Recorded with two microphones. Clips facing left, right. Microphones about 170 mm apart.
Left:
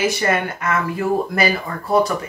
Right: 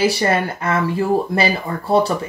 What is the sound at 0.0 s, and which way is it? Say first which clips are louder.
Speech: right 2 dB; 30° right (ahead or behind).